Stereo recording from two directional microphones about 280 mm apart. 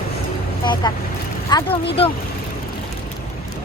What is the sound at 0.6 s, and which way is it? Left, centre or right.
Speech, centre.